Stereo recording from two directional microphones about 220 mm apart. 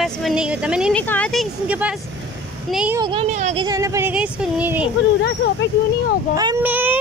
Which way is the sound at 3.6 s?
15° right (ahead or behind).